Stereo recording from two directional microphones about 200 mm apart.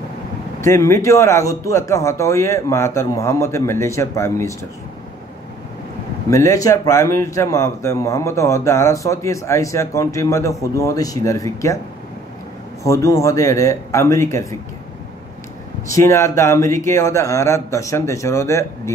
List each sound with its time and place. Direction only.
0.6 s a man's voice: 15° left (ahead or behind)
6.3 s a man's voice: 15° left (ahead or behind)
12.8 s a man's voice: 15° left (ahead or behind)
15.9 s a man's voice: 15° left (ahead or behind)